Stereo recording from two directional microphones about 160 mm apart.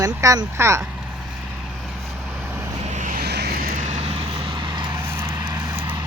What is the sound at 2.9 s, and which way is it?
Vehicle, 55° right (ahead or behind).